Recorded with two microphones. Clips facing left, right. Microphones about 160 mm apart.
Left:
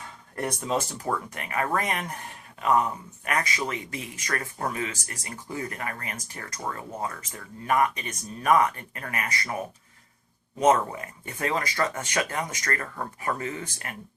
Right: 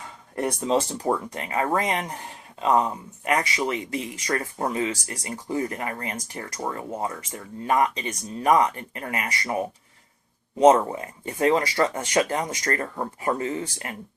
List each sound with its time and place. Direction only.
0.6 s speech: 30° right (ahead or behind)